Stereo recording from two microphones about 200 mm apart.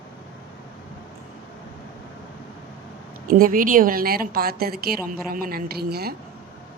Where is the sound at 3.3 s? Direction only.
45° right (ahead or behind).